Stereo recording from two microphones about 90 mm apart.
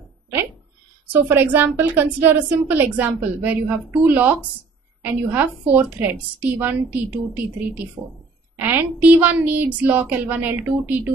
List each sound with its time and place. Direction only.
1.1 s a woman's voice: 20° right (ahead or behind)